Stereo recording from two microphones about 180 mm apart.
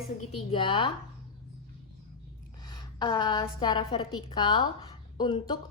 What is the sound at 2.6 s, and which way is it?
A woman's voice, 25° left (ahead or behind).